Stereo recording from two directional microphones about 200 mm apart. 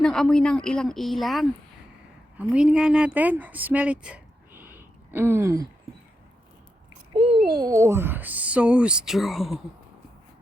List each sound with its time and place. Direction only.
0.0 s a woman's voice: 5° left (ahead or behind); by 5.6 s 15° right (ahead or behind)
7.1 s speech: 25° right (ahead or behind); by 9.6 s centre (ahead or behind)